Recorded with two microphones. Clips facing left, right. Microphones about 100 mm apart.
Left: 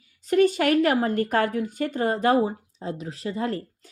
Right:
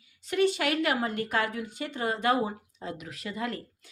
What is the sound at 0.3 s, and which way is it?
A woman's voice, 40° left (ahead or behind).